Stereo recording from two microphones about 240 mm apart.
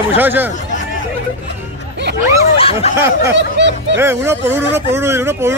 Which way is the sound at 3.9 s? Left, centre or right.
Centre.